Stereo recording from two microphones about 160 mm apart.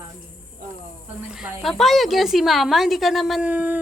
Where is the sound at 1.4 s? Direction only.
Centre (ahead or behind).